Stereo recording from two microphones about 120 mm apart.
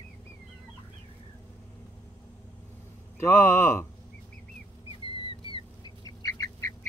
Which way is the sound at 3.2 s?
20° left (ahead or behind).